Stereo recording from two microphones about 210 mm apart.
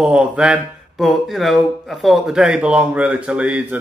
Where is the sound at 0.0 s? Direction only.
5° right (ahead or behind).